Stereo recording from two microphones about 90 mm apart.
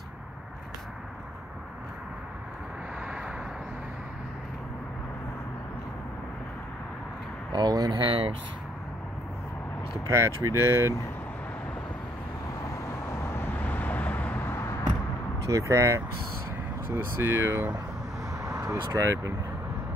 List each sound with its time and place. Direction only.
3.1 s vehicle: 10° right (ahead or behind)
7.5 s speech: 50° right (ahead or behind)
10.0 s speech: 30° right (ahead or behind)
12.7 s vehicle: 35° left (ahead or behind)
15.5 s speech: 35° right (ahead or behind)
18.4 s a sound: 35° right (ahead or behind)